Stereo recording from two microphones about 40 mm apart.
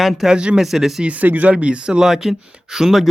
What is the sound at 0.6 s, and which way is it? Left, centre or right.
Speech, centre.